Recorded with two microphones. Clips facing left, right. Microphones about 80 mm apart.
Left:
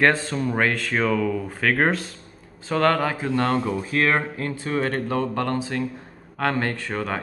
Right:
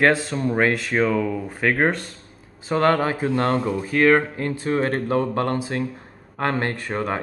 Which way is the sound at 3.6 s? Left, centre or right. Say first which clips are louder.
Right 4 dB; centre.